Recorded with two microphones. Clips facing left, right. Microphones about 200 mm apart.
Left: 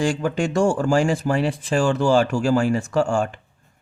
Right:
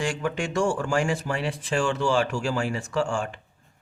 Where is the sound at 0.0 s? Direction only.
35° left (ahead or behind).